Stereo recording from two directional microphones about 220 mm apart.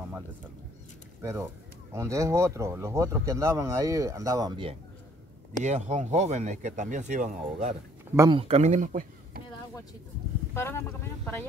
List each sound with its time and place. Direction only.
1.2 s speech: 10° right (ahead or behind)
5.6 s speech: 30° right (ahead or behind)
8.2 s speech: 25° right (ahead or behind)
10.5 s speech: 10° left (ahead or behind)